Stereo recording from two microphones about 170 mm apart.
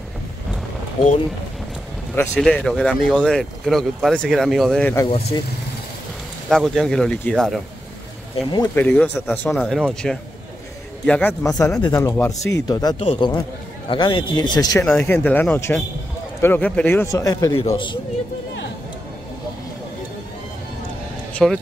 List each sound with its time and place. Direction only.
2.1 s speech: 5° left (ahead or behind)
5.0 s speech: 30° left (ahead or behind)
6.5 s speech: centre (ahead or behind)
8.4 s speech: 25° left (ahead or behind)
8.7 s a man's voice: 10° left (ahead or behind)
11.4 s speech: 20° left (ahead or behind)
13.0 s a man's voice: 35° left (ahead or behind)
14.9 s a man's voice: 10° left (ahead or behind)
21.4 s speech: centre (ahead or behind)